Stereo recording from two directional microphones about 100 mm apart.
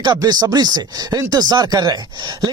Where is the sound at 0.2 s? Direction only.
40° right (ahead or behind).